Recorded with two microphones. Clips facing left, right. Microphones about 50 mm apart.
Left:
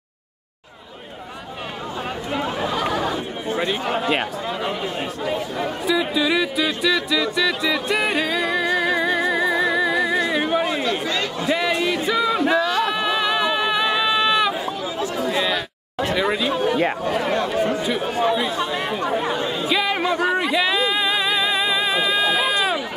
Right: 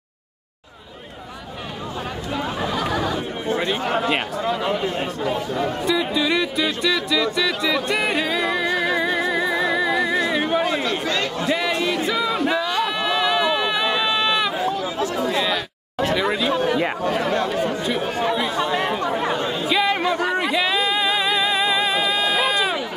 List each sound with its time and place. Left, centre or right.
2.4 s speech: centre
7.3 s music: centre
11.1 s a sound: centre
11.4 s a sound: centre
15.3 s chatter: centre
17.6 s chatter: centre
18.2 s speech: centre
19.6 s music: centre